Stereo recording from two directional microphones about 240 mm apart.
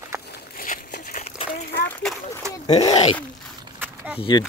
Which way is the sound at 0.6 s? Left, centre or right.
Left.